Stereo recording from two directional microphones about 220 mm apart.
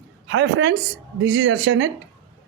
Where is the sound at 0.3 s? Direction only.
60° right (ahead or behind).